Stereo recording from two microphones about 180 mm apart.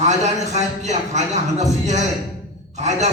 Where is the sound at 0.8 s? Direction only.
40° right (ahead or behind).